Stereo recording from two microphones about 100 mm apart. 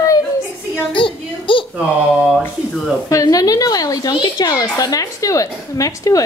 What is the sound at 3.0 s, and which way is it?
A woman's voice, 35° left (ahead or behind).